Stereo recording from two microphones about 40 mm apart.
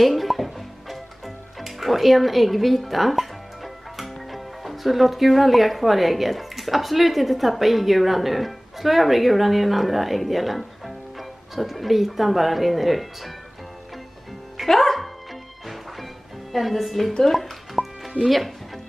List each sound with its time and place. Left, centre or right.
0.0 s speech: centre
14.6 s music: centre
16.5 s speech: centre
17.3 s music: centre
18.2 s speech: centre